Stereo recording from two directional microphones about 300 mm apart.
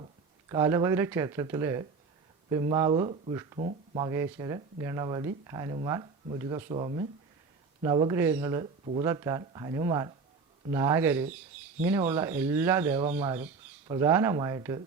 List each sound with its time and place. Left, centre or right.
0.0 s speech: centre
8.8 s speech: right
9.0 s speech: centre